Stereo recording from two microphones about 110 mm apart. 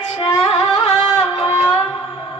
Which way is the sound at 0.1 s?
45° left (ahead or behind).